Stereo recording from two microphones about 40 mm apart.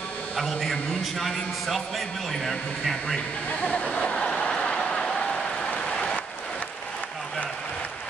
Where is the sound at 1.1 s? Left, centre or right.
Centre.